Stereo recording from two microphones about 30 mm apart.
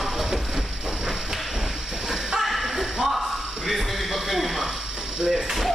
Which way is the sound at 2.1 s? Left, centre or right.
Centre.